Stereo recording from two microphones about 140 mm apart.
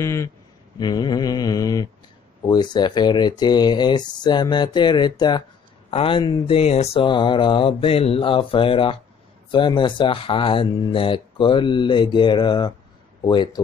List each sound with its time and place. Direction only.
0.0 s mantra: 20° left (ahead or behind)
2.4 s speech: 30° left (ahead or behind)